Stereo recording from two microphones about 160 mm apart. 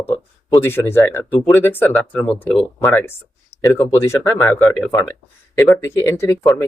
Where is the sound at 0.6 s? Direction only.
15° left (ahead or behind).